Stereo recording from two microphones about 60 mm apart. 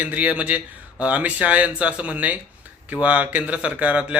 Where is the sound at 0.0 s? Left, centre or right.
Right.